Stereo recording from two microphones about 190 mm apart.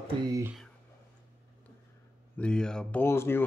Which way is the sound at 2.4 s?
5° left (ahead or behind).